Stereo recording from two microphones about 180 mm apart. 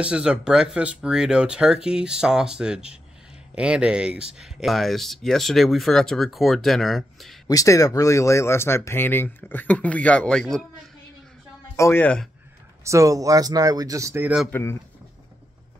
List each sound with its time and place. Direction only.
0.0 s speech: 5° right (ahead or behind)
7.4 s speech: 20° left (ahead or behind)
11.7 s speech: 15° left (ahead or behind)
12.8 s speech: 15° right (ahead or behind)
14.5 s speech: 15° left (ahead or behind)